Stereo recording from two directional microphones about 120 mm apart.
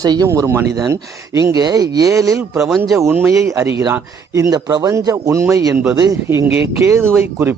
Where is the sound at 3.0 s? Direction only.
20° right (ahead or behind).